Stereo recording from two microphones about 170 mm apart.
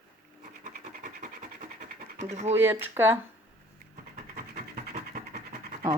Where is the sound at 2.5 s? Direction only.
15° right (ahead or behind).